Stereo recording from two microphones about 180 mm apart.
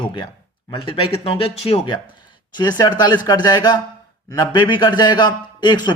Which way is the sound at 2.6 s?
25° left (ahead or behind).